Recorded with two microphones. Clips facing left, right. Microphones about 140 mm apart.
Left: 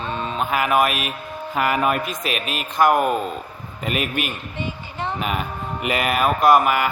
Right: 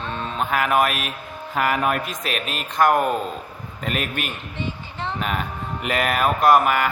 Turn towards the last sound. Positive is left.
turn(degrees=5)  # may be behind; listen again after turning